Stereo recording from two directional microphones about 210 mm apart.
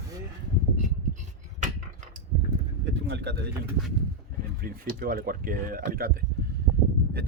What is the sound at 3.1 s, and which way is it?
Speech, 50° right (ahead or behind).